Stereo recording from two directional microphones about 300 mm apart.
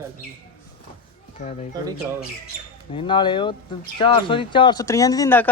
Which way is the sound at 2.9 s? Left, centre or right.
Centre.